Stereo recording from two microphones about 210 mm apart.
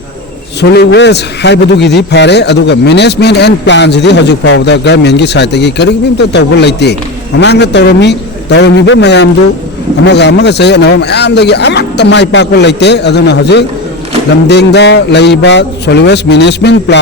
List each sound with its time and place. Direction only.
0.6 s a man's voice: 55° left (ahead or behind)